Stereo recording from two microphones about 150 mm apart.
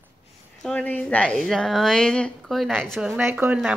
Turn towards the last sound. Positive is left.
turn(degrees=-10)  # may be behind; listen again after turning